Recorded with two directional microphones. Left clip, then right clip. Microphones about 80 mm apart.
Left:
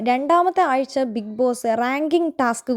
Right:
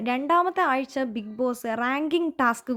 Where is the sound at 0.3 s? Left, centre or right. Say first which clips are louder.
Left 3 dB; left.